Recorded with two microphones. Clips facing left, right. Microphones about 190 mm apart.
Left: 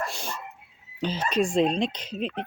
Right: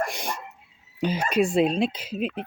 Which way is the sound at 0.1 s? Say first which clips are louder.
Right 3 dB; 15° right (ahead or behind).